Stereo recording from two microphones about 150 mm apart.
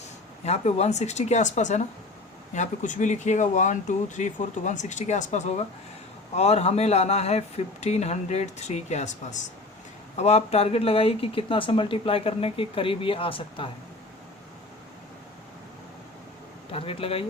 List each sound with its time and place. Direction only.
0.4 s speech: 45° left (ahead or behind)
16.7 s speech: 40° left (ahead or behind)